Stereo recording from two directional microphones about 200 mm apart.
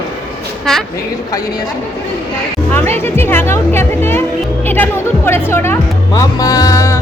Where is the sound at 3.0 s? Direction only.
10° left (ahead or behind).